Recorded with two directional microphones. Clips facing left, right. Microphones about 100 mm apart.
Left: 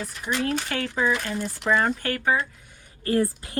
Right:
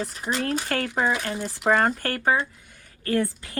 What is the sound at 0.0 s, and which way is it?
Speech, 35° right (ahead or behind).